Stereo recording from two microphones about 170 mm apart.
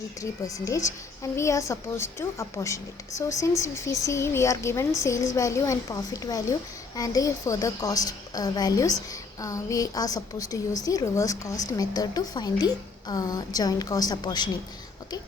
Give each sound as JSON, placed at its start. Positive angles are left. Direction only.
{"t": 0.2, "sound": "a woman's voice", "side_deg": 20}